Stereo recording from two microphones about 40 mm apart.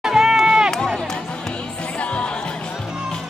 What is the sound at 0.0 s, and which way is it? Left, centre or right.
Run, centre.